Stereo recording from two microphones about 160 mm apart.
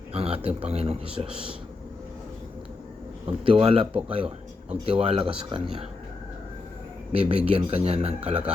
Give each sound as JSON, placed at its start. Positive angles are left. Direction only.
{"t": 0.1, "sound": "a man's voice", "side_deg": -40}
{"t": 3.4, "sound": "a man's voice", "side_deg": -35}
{"t": 7.1, "sound": "a man's voice", "side_deg": -35}